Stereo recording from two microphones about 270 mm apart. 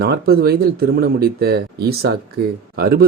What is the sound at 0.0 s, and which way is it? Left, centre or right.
Speech, right.